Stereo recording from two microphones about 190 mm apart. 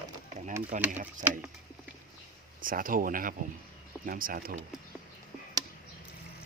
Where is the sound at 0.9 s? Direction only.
40° right (ahead or behind).